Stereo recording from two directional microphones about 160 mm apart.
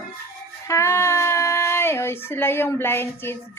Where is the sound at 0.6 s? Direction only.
20° left (ahead or behind).